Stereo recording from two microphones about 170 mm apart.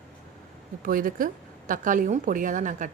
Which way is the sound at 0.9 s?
55° right (ahead or behind).